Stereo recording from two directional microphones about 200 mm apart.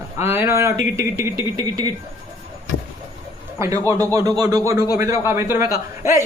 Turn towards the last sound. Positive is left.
turn(degrees=-15)  # may be behind; listen again after turning